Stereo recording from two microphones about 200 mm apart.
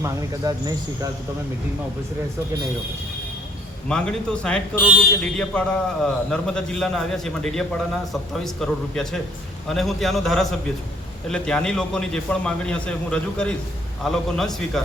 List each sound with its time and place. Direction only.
0.0 s speech: 15° right (ahead or behind)
3.8 s a man's voice: 5° left (ahead or behind)